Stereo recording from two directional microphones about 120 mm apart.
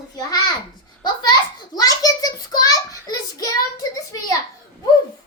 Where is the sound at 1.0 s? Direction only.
35° left (ahead or behind).